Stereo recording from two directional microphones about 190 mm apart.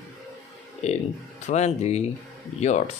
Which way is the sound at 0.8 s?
35° left (ahead or behind).